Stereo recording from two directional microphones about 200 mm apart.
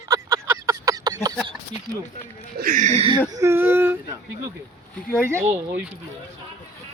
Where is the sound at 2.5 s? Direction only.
45° right (ahead or behind).